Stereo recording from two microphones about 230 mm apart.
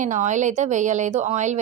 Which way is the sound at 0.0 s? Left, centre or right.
Right.